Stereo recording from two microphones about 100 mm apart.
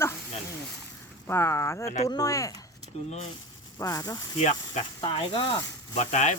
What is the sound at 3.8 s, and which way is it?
Speech, 35° left (ahead or behind).